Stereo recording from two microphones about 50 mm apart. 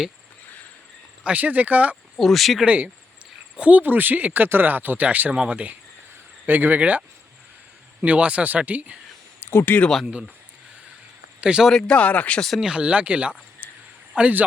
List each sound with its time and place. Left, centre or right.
1.2 s speech: right
2.1 s speech: centre
2.6 s speech: right
6.4 s speech: right
8.0 s speech: right
9.4 s a sound: left
11.3 s speech: right
11.8 s speech: left
12.5 s speech: centre